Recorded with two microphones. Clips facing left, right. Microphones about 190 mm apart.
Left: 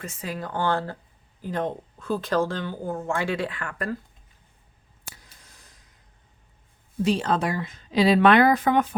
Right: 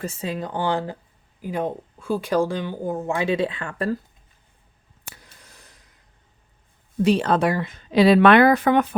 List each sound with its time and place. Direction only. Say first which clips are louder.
0.0 s speech: right 5 dB; 30° right (ahead or behind)
5.0 s a sound: right 2 dB; 65° right (ahead or behind)
7.0 s speech: right 5 dB; 65° right (ahead or behind)